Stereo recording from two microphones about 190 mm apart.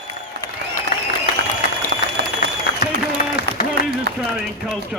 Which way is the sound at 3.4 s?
55° left (ahead or behind).